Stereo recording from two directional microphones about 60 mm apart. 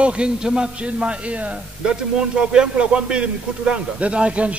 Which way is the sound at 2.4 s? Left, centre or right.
Centre.